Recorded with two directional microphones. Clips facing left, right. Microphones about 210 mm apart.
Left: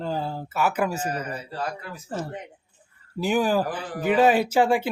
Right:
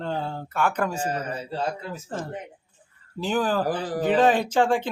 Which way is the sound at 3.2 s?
10° left (ahead or behind).